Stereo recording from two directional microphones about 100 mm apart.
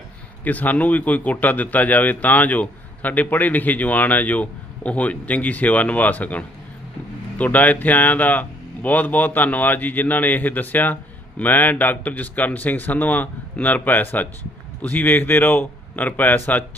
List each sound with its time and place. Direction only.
0.4 s a man's voice: 15° left (ahead or behind)